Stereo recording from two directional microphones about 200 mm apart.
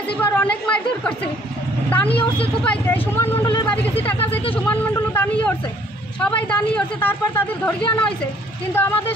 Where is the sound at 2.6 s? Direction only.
10° left (ahead or behind).